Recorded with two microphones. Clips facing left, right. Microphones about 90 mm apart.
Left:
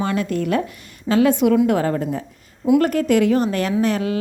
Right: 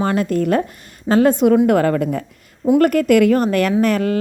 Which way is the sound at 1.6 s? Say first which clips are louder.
Right 4 dB; 55° right (ahead or behind).